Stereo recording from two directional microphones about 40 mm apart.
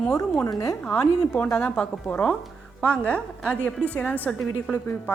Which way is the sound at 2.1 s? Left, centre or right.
Left.